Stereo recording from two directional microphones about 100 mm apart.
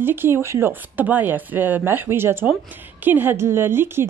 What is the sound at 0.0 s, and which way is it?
A woman's voice, 20° right (ahead or behind).